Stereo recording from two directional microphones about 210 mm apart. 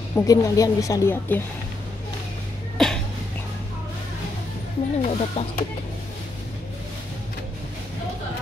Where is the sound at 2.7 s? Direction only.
Centre (ahead or behind).